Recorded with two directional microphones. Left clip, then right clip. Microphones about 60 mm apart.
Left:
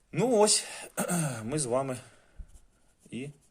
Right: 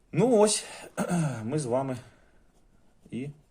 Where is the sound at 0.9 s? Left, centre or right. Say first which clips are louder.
Right 2 dB; left.